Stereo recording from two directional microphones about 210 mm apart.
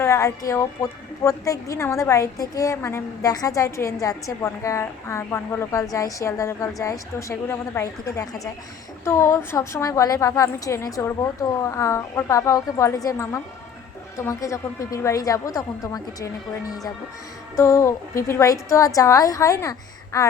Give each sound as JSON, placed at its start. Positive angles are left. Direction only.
{"t": 0.0, "sound": "a woman's voice", "side_deg": 15}